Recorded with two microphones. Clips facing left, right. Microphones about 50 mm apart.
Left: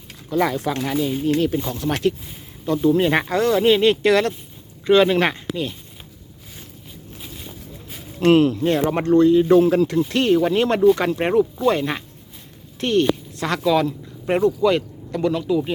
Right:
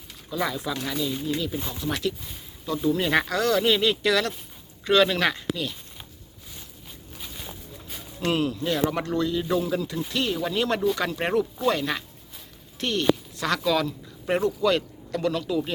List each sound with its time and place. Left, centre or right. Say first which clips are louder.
0.3 s speech: left 7 dB; left
0.9 s speech: left 6 dB; left
1.2 s speech: left 9 dB; left
1.5 s speech: left 6 dB; left
2.8 s speech: left 5 dB; left
3.8 s speech: left 6 dB; left
4.9 s speech: left 5 dB; left
8.2 s speech: left 10 dB; left
11.2 s speech: left 6 dB; centre
11.6 s a woman's voice: left 5 dB; left; by 15.7 s centre